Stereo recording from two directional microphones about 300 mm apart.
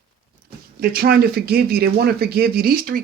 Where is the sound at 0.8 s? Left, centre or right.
Right.